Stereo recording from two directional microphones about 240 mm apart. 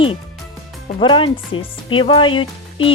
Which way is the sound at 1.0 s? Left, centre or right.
Left.